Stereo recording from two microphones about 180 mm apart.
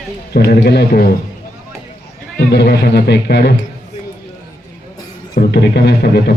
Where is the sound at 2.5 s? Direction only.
65° left (ahead or behind).